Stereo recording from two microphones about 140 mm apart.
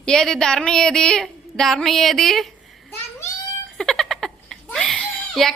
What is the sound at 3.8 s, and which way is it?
Giggle, 5° left (ahead or behind).